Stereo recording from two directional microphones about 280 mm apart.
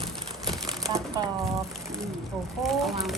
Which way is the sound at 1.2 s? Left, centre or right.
Centre.